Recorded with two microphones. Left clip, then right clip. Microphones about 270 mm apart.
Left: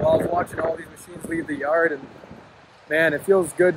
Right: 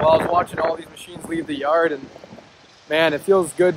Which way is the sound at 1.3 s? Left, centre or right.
Centre.